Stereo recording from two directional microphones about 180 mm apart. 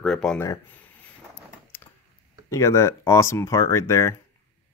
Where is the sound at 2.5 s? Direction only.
15° left (ahead or behind).